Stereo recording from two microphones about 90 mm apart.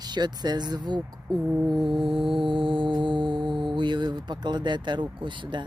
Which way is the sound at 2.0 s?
70° right (ahead or behind).